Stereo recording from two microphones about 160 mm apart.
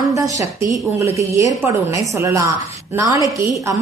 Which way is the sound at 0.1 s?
20° right (ahead or behind).